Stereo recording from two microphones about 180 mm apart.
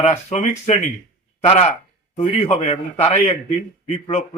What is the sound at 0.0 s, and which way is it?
Speech, 35° left (ahead or behind).